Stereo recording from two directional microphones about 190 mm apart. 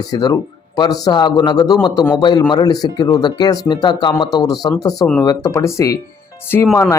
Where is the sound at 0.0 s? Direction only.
20° left (ahead or behind).